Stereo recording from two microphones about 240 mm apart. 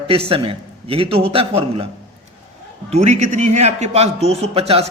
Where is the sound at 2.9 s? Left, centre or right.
Right.